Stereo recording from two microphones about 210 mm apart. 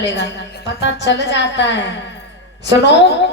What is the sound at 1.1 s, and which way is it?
Speech, 55° left (ahead or behind).